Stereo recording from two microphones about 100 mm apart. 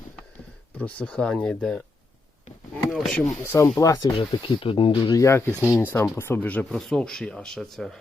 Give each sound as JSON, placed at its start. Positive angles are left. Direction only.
{"t": 0.8, "sound": "speech", "side_deg": 15}
{"t": 2.9, "sound": "speech", "side_deg": 0}
{"t": 3.4, "sound": "speech", "side_deg": 25}
{"t": 3.8, "sound": "speech", "side_deg": 35}
{"t": 4.2, "sound": "speech", "side_deg": 65}
{"t": 5.1, "sound": "speech", "side_deg": 30}